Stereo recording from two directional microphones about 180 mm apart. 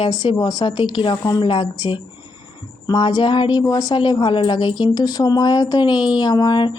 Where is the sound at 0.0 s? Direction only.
25° left (ahead or behind).